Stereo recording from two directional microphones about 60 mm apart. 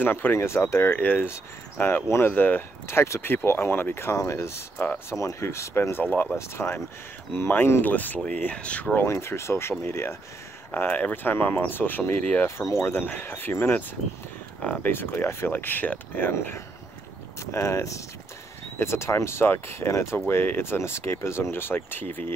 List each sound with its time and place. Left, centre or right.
0.0 s speech: left
0.9 s speech: left
4.2 s speech: left
4.7 s speech: left
5.2 s speech: left
7.8 s speech: left
8.9 s speech: left
10.7 s speech: left
12.4 s speech: left
12.8 s speech: left
14.9 s speech: left
17.5 s speech: left
18.8 s speech: left
20.2 s speech: left